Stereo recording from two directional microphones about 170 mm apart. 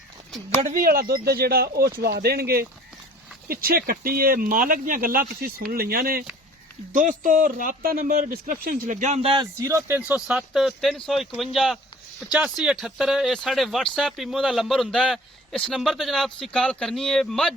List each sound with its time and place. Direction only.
0.7 s a man's voice: 60° right (ahead or behind); by 17.5 s 5° left (ahead or behind)